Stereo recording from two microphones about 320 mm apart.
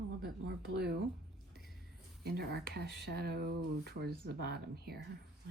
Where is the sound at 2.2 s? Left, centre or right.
Right.